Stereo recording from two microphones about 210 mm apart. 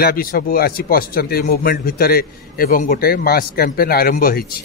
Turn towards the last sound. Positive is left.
turn(degrees=45)  # may be behind; listen again after turning